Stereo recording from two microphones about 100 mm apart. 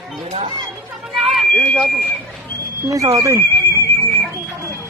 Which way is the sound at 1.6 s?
15° left (ahead or behind).